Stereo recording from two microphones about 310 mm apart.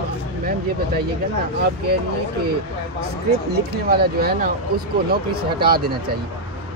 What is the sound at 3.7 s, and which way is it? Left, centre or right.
Speech, right.